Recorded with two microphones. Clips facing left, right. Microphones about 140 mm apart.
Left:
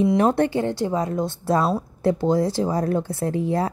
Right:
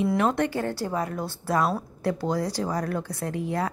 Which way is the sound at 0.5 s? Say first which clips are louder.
Left 5 dB; 20° left (ahead or behind).